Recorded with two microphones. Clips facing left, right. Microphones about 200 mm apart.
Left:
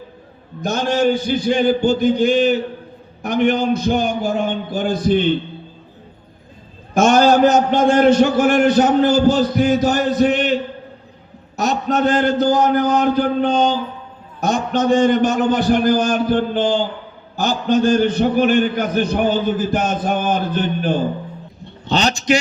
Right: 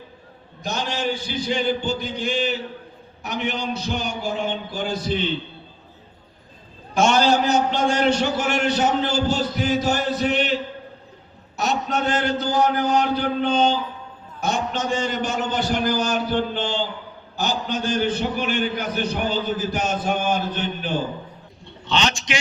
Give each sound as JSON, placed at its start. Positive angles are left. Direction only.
{"t": 0.6, "sound": "a man's voice", "side_deg": 50}
{"t": 6.9, "sound": "a man's voice", "side_deg": 50}
{"t": 11.5, "sound": "a man's voice", "side_deg": 45}
{"t": 21.8, "sound": "a man's voice", "side_deg": 35}